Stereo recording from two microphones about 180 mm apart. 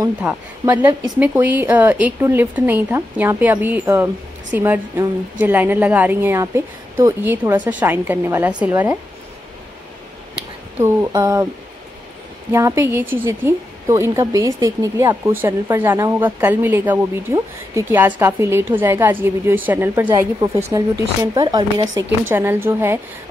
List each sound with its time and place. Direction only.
0.2 s speech: 5° right (ahead or behind)
0.7 s speech: 20° right (ahead or behind)
1.2 s speech: 10° right (ahead or behind)
10.8 s speech: 15° right (ahead or behind)
12.5 s speech: 15° right (ahead or behind)
22.3 s speech: 10° right (ahead or behind)